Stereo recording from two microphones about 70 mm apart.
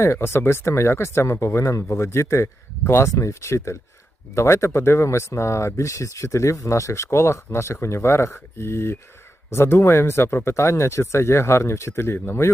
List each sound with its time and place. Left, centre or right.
0.0 s speech: left